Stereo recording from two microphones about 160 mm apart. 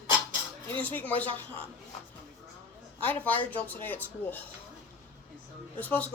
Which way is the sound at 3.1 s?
10° left (ahead or behind).